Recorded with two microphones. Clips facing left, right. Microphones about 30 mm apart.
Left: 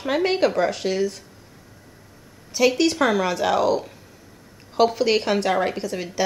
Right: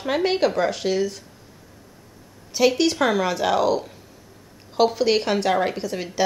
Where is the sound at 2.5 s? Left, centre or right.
Centre.